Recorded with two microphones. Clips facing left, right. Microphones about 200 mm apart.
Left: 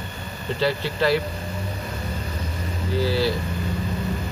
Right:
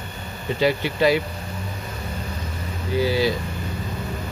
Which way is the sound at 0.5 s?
15° right (ahead or behind).